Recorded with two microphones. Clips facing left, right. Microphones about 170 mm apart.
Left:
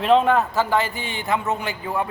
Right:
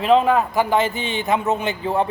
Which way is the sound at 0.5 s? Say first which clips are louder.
Right 3 dB; 15° right (ahead or behind).